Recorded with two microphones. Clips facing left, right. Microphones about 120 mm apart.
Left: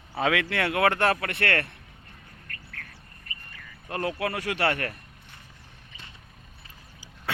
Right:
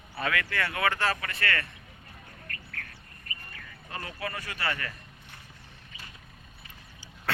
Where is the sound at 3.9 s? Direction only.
65° left (ahead or behind).